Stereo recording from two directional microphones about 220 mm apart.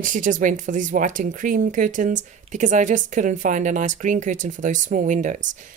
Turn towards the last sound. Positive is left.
turn(degrees=-35)  # may be behind; listen again after turning